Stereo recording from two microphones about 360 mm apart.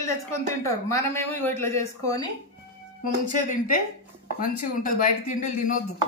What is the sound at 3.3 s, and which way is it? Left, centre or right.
Speech, left.